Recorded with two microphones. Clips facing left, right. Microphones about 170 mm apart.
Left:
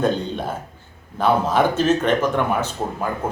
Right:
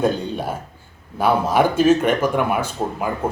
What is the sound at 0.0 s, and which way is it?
Speech, 10° right (ahead or behind).